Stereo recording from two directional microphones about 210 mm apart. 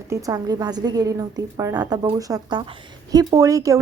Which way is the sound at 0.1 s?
15° right (ahead or behind).